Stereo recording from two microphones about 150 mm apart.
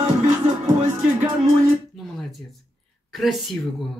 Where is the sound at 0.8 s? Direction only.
55° right (ahead or behind).